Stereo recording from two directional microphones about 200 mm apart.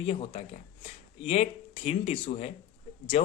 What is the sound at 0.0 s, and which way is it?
Speech, 25° left (ahead or behind).